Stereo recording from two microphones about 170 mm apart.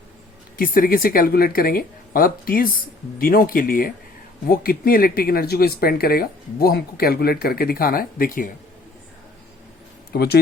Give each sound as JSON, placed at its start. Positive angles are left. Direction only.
{"t": 0.5, "sound": "speech", "side_deg": 55}
{"t": 10.1, "sound": "speech", "side_deg": 70}